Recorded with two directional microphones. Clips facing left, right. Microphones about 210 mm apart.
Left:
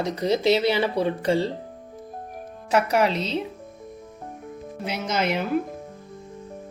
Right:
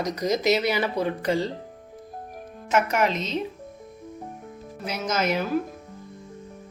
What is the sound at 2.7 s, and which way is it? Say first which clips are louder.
Speech: left 2 dB; 35° left (ahead or behind).